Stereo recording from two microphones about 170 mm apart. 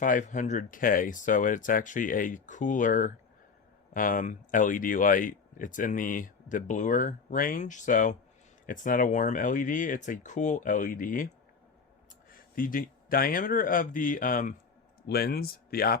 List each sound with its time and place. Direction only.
0.0 s speech: 50° left (ahead or behind)
12.3 s speech: 55° left (ahead or behind)
15.0 s speech: 65° left (ahead or behind)